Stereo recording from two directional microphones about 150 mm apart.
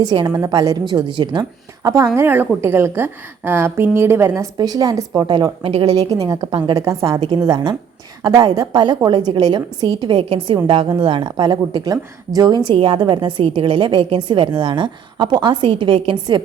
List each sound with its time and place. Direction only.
0.0 s a woman's voice: 30° right (ahead or behind)